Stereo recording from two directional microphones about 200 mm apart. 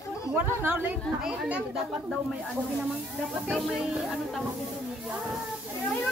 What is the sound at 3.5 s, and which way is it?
Speech, centre (ahead or behind).